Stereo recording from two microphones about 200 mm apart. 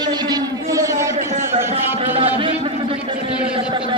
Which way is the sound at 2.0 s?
30° right (ahead or behind).